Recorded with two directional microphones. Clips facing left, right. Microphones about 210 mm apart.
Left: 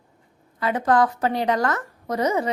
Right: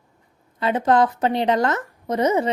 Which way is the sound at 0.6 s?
25° right (ahead or behind).